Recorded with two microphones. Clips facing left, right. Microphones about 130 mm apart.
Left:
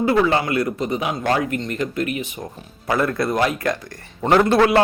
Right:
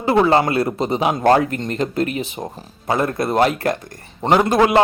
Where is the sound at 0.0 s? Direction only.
30° right (ahead or behind).